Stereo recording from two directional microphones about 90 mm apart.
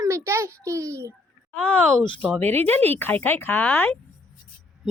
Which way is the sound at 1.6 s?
15° left (ahead or behind).